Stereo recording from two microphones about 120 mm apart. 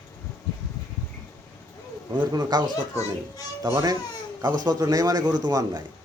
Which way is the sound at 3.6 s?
30° right (ahead or behind).